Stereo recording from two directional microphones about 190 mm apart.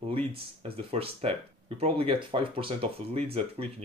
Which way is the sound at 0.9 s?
30° right (ahead or behind).